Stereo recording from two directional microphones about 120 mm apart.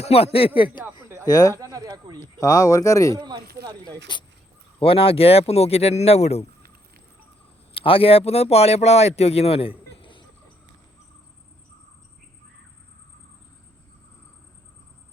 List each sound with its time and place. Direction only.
0.0 s speech: 60° left (ahead or behind)
1.0 s a sound: 20° right (ahead or behind)
1.3 s speech: 30° left (ahead or behind)
1.5 s a sound: 30° right (ahead or behind)
2.1 s speech: 25° left (ahead or behind)
3.2 s speech: 35° right (ahead or behind)
4.8 s speech: 50° left (ahead or behind)
7.7 s speech: 50° left (ahead or behind)